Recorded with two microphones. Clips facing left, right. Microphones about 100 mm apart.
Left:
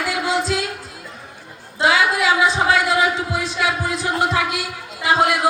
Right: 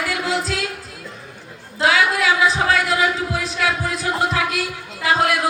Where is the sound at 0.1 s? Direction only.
25° left (ahead or behind).